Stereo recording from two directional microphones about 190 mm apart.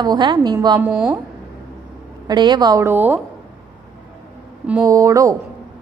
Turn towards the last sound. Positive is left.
turn(degrees=-15)  # may be behind; listen again after turning